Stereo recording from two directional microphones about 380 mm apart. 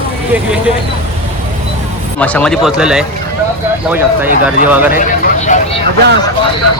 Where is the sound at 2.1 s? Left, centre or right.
Centre.